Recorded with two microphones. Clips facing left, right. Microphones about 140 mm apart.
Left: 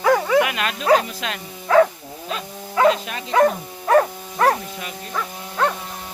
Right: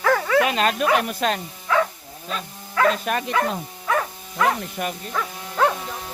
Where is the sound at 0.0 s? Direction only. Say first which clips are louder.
Left 3 dB; 15° left (ahead or behind).